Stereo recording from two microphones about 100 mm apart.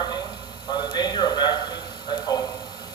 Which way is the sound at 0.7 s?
45° left (ahead or behind).